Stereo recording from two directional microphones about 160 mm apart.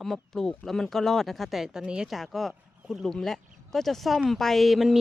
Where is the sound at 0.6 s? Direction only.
Centre (ahead or behind).